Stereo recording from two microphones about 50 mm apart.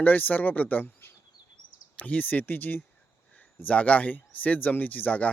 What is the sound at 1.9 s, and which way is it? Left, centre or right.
Speech, left.